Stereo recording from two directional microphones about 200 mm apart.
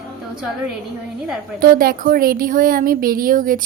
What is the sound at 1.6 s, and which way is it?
A woman's voice, 45° right (ahead or behind).